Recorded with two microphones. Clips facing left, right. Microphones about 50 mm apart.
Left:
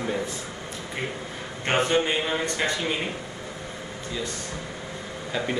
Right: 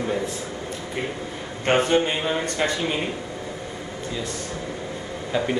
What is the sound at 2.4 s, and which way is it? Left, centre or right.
Speech, left.